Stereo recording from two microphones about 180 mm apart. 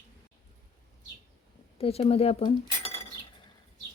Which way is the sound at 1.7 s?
35° left (ahead or behind).